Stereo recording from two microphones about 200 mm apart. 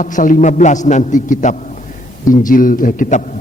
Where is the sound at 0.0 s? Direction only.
40° left (ahead or behind).